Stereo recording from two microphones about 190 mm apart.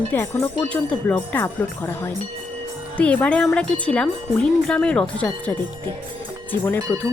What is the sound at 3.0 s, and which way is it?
Speech, 5° left (ahead or behind).